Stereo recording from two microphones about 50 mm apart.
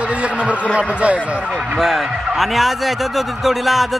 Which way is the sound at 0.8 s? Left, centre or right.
Right.